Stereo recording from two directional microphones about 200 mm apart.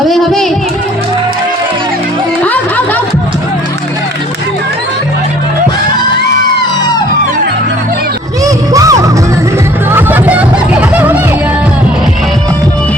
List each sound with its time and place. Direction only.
0.1 s speech: centre (ahead or behind)
8.4 s music: 15° right (ahead or behind)